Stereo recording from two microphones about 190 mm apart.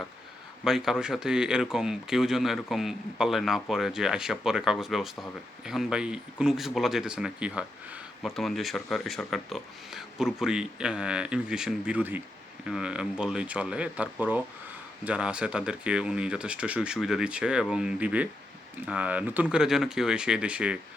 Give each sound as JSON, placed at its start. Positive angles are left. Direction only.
{"t": 0.6, "sound": "speech", "side_deg": 0}